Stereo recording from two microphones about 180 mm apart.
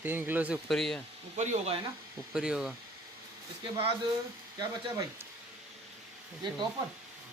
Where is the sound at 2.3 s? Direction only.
5° right (ahead or behind).